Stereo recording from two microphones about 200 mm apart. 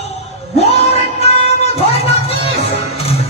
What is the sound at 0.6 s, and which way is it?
Music, 30° left (ahead or behind).